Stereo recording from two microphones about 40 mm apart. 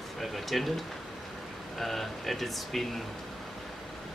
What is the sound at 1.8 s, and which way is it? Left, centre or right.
Speech, centre.